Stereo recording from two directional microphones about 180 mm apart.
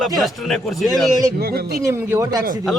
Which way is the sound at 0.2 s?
Centre (ahead or behind).